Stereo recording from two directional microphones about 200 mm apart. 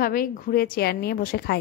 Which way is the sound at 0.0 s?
45° left (ahead or behind).